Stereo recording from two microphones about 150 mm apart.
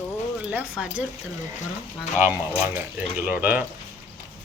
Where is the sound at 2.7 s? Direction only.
10° right (ahead or behind).